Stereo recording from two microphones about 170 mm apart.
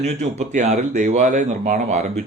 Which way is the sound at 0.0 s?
40° right (ahead or behind).